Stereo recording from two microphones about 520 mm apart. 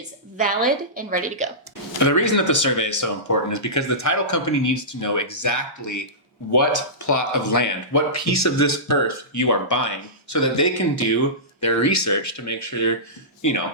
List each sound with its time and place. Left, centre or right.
0.3 s a woman's voice: centre
2.0 s speech: left